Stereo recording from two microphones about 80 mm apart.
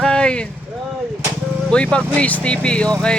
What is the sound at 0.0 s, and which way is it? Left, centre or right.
Vehicle, centre.